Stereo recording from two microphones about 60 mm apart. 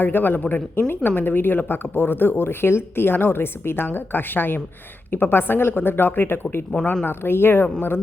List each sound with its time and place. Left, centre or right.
0.0 s speech: left